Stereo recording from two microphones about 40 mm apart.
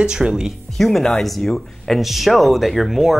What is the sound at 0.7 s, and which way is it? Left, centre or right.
Speech, centre.